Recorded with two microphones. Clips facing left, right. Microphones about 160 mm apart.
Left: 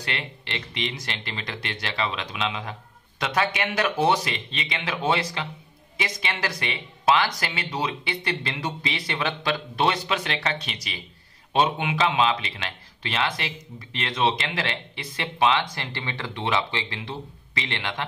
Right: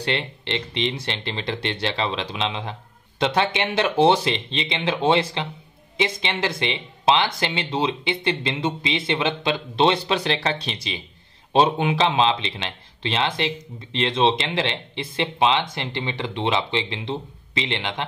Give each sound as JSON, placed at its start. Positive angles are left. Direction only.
{"t": 0.0, "sound": "speech", "side_deg": -30}